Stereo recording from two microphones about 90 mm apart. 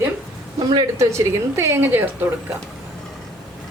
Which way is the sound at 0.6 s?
50° right (ahead or behind).